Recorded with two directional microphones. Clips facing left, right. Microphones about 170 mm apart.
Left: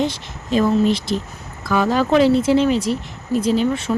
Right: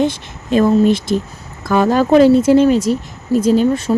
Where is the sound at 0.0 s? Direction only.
50° right (ahead or behind).